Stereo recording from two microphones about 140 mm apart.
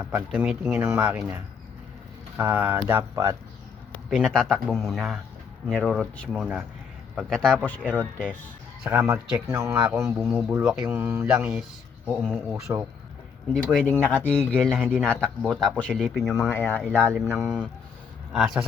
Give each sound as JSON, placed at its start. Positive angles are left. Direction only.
{"t": 0.0, "sound": "speech", "side_deg": -15}
{"t": 2.4, "sound": "speech", "side_deg": -15}
{"t": 4.1, "sound": "a man's voice", "side_deg": 0}
{"t": 7.8, "sound": "a man's voice", "side_deg": -10}
{"t": 16.5, "sound": "speech", "side_deg": 15}
{"t": 17.2, "sound": "a man's voice", "side_deg": -5}